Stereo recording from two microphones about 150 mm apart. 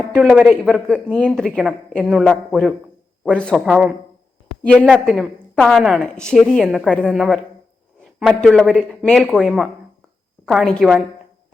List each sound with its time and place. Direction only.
0.1 s speech: 10° right (ahead or behind)
1.1 s a woman's voice: 5° left (ahead or behind)